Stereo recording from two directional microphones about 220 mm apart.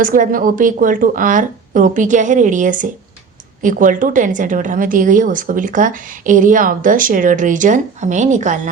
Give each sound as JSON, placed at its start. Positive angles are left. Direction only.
{"t": 0.0, "sound": "a woman's voice", "side_deg": -40}